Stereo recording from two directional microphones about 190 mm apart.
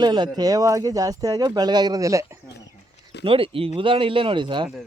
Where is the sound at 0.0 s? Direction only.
20° right (ahead or behind).